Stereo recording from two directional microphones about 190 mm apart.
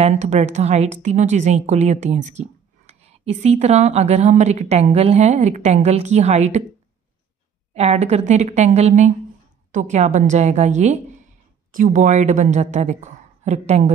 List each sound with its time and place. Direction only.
0.0 s a woman's voice: 40° right (ahead or behind)
7.7 s a woman's voice: 35° right (ahead or behind)